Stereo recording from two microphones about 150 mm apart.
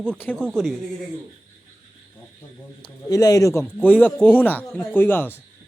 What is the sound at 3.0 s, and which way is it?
Speech, 25° left (ahead or behind).